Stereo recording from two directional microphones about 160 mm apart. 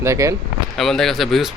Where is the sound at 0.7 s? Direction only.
Centre (ahead or behind).